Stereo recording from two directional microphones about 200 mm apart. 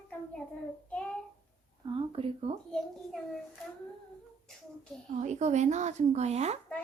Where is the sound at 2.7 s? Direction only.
5° left (ahead or behind).